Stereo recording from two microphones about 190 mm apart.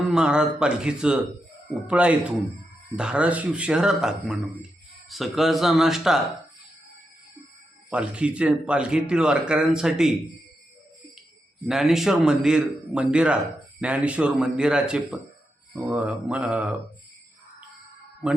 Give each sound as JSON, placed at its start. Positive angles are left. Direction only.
{"t": 0.1, "sound": "speech", "side_deg": -5}
{"t": 7.9, "sound": "speech", "side_deg": -5}
{"t": 11.6, "sound": "speech", "side_deg": 0}